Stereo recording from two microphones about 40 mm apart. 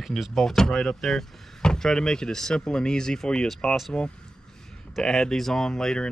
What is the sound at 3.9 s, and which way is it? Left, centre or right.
Speech, left.